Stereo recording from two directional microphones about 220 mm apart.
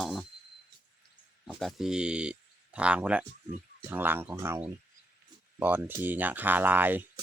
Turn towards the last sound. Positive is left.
turn(degrees=-10)  # may be behind; listen again after turning